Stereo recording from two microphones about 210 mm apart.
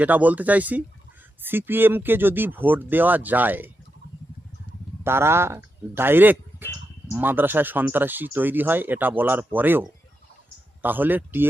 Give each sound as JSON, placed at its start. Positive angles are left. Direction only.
{"t": 0.0, "sound": "speech", "side_deg": -5}
{"t": 5.0, "sound": "speech", "side_deg": -10}
{"t": 10.8, "sound": "speech", "side_deg": -10}